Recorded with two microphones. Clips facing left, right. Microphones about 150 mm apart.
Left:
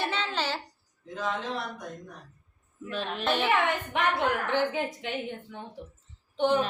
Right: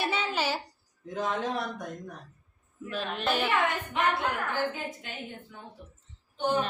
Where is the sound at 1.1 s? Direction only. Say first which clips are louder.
Right 2 dB; 50° right (ahead or behind).